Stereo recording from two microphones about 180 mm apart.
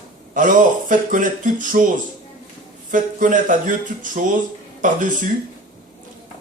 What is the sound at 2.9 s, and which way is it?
Speech, 45° right (ahead or behind).